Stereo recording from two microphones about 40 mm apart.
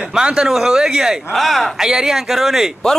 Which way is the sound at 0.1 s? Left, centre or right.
Centre.